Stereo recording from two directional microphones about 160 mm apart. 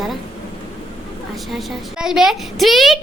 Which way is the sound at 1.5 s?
Centre (ahead or behind).